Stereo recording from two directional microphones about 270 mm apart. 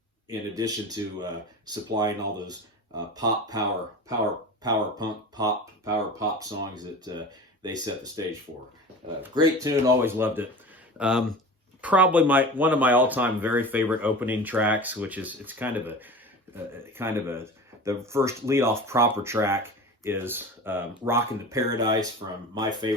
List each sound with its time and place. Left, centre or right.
0.5 s speech: centre
4.6 s speech: centre